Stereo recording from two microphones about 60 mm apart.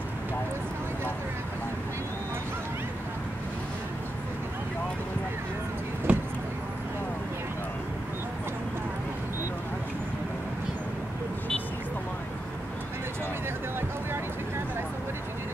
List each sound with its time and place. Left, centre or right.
6.1 s vehicle: right